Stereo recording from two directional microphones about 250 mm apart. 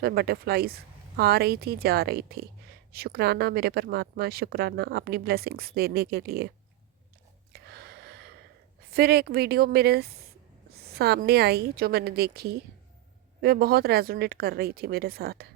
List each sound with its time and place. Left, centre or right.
0.0 s speech: right
7.5 s a sound: right
8.9 s speech: right